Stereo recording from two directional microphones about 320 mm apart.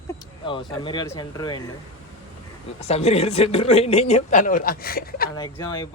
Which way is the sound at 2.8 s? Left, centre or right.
Centre.